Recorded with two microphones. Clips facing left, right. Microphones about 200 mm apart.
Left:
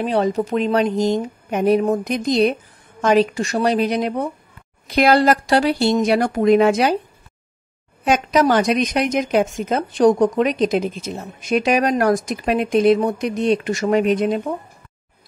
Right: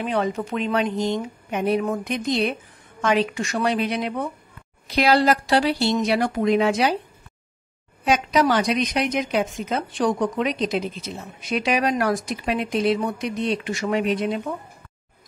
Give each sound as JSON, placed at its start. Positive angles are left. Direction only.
{"t": 0.0, "sound": "speech", "side_deg": 35}
{"t": 4.8, "sound": "speech", "side_deg": 50}
{"t": 8.0, "sound": "speech", "side_deg": 50}